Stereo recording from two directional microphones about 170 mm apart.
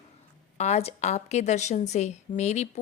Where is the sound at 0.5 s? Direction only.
40° left (ahead or behind).